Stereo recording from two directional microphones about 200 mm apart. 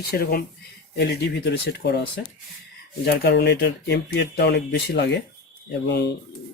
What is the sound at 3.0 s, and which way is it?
Speech, 55° left (ahead or behind).